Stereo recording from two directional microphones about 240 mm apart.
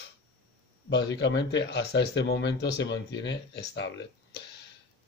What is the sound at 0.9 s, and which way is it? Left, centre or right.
Speech, left.